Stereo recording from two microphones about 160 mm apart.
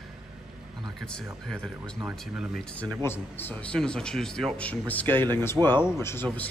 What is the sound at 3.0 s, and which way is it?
Speech, 15° left (ahead or behind).